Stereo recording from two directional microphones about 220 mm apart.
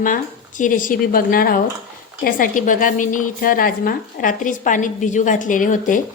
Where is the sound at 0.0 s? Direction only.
35° left (ahead or behind).